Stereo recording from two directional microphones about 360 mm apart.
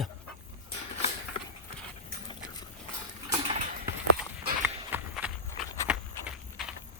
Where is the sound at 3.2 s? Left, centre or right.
Centre.